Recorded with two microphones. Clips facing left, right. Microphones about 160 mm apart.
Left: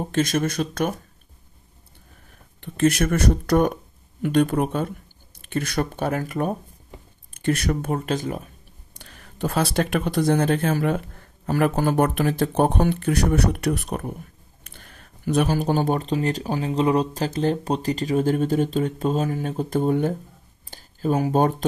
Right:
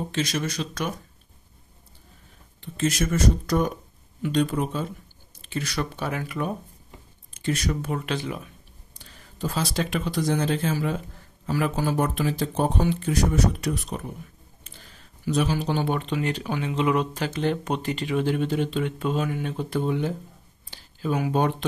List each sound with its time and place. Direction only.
0.1 s speech: 50° left (ahead or behind)
2.6 s speech: 60° left (ahead or behind); by 6.5 s 45° left (ahead or behind)
7.3 s speech: 55° left (ahead or behind)
8.9 s speech: 65° left (ahead or behind); by 21.6 s 40° left (ahead or behind)